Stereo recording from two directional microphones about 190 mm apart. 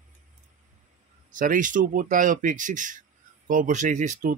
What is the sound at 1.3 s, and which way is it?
Speech, 45° right (ahead or behind).